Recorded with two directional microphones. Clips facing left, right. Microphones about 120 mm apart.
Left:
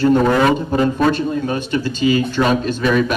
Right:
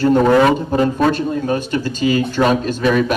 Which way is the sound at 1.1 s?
45° right (ahead or behind).